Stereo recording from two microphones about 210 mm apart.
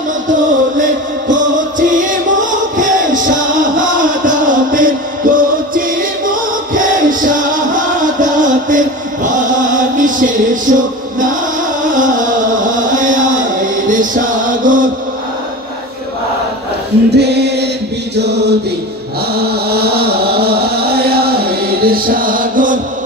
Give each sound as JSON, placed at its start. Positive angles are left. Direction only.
{"t": 0.3, "sound": "music", "side_deg": -35}
{"t": 17.1, "sound": "music", "side_deg": -50}
{"t": 18.1, "sound": "chant", "side_deg": -55}
{"t": 19.3, "sound": "a sound", "side_deg": -50}